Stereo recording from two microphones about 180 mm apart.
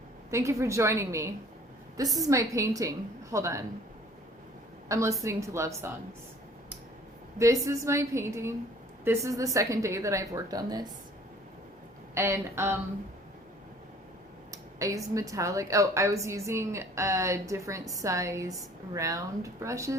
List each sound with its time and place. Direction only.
0.3 s a woman's voice: 15° right (ahead or behind)
4.9 s a woman's voice: 15° right (ahead or behind)
7.3 s a woman's voice: 15° right (ahead or behind)
12.1 s a woman's voice: 15° right (ahead or behind)
14.5 s a woman's voice: 20° right (ahead or behind)